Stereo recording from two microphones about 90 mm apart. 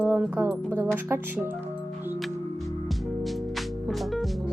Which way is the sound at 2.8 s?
Centre (ahead or behind).